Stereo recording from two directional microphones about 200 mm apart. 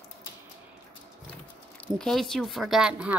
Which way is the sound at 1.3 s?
5° left (ahead or behind).